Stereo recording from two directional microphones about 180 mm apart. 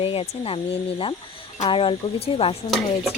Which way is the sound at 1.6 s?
30° left (ahead or behind).